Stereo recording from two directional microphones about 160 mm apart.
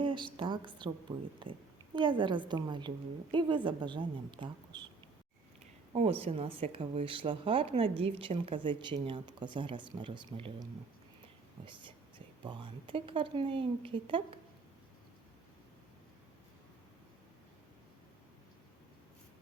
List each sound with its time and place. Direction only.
0.0 s a sound: 30° right (ahead or behind)
0.3 s a woman's voice: 30° right (ahead or behind)
5.9 s a woman's voice: 35° right (ahead or behind)